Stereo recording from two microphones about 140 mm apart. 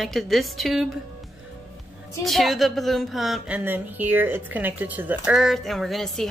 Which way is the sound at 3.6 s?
15° right (ahead or behind).